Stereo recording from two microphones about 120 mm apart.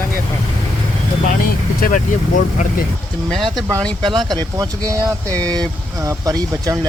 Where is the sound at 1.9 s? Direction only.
90° left.